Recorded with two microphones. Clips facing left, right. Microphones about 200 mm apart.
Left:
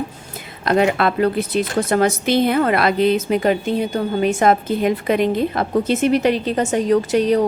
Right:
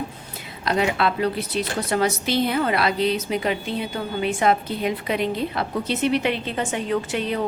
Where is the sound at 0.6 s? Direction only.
50° left (ahead or behind).